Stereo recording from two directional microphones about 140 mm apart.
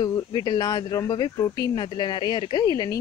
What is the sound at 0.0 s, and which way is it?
A woman's voice, 30° left (ahead or behind).